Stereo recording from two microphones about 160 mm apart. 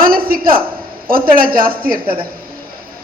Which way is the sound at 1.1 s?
65° right (ahead or behind).